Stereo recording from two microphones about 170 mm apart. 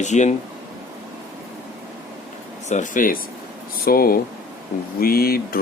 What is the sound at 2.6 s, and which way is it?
Speech, 45° left (ahead or behind).